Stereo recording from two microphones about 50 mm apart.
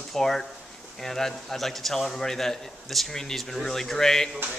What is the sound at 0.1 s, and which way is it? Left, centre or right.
A man's voice, centre.